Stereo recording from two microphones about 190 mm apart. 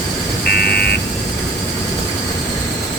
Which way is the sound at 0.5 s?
55° left (ahead or behind).